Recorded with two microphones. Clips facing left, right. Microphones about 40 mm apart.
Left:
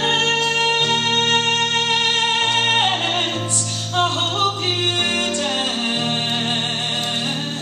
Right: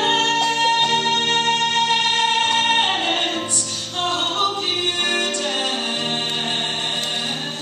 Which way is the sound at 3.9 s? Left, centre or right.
Left.